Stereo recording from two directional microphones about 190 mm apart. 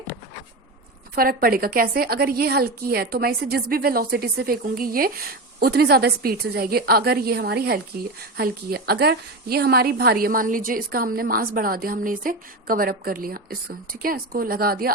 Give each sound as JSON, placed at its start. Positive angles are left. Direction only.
{"t": 1.1, "sound": "a woman's voice", "side_deg": -50}